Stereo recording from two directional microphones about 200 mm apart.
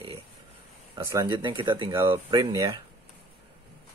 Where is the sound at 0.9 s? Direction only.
20° right (ahead or behind).